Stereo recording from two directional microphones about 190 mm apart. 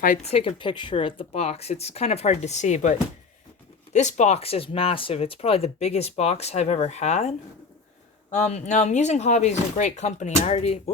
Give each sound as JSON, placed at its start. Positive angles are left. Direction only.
{"t": 0.0, "sound": "a woman's voice", "side_deg": 40}
{"t": 3.9, "sound": "speech", "side_deg": 40}